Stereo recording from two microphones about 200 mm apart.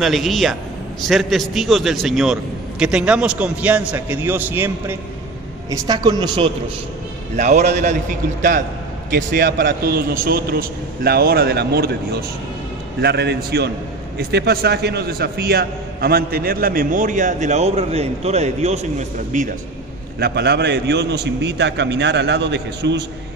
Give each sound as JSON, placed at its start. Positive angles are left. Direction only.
{"t": 0.0, "sound": "a man's voice", "side_deg": 0}
{"t": 5.7, "sound": "a woman's voice", "side_deg": -20}
{"t": 7.3, "sound": "a man's voice", "side_deg": -35}
{"t": 20.2, "sound": "a man's voice", "side_deg": -55}